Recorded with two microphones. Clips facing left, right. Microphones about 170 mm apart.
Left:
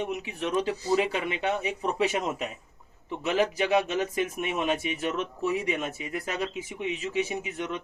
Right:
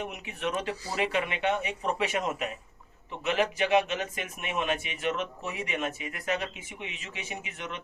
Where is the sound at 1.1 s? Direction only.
35° left (ahead or behind).